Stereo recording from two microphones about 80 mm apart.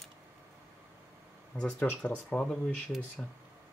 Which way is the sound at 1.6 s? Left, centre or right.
Centre.